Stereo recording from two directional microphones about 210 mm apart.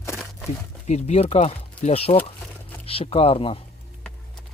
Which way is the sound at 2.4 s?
5° left (ahead or behind).